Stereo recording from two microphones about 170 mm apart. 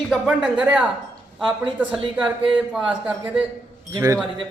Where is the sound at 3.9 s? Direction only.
20° right (ahead or behind).